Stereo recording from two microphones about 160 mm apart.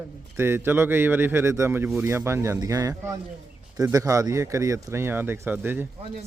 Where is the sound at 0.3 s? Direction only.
15° right (ahead or behind).